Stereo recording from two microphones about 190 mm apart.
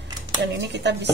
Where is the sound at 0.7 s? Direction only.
65° right (ahead or behind).